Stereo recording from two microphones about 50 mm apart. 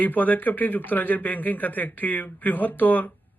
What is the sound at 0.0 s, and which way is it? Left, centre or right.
Speech, left.